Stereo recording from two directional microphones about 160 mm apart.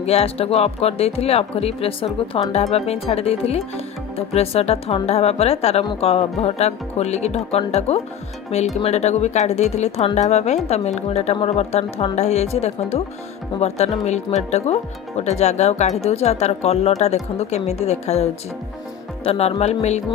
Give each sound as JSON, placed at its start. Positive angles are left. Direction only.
{"t": 0.0, "sound": "speech", "side_deg": 40}